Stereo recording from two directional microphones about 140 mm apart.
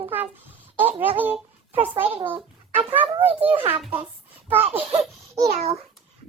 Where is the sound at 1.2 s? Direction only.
10° right (ahead or behind).